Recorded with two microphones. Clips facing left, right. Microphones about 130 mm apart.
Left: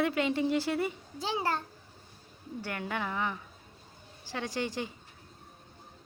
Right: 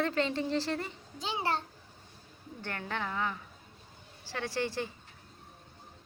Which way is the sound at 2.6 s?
10° left (ahead or behind).